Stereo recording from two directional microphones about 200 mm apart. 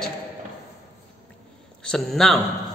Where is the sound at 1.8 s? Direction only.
5° left (ahead or behind).